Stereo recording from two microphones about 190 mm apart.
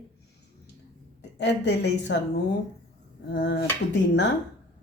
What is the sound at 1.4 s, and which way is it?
Speech, 65° left (ahead or behind).